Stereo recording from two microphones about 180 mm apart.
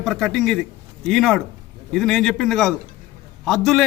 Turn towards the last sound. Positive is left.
turn(degrees=0)  # may be behind; listen again after turning